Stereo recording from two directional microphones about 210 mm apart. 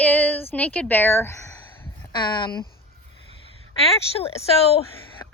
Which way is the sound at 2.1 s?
20° left (ahead or behind).